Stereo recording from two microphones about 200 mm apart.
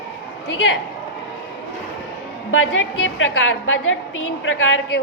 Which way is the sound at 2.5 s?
80° left.